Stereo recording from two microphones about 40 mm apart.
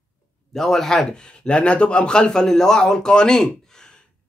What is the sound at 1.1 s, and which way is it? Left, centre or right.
A man's voice, left.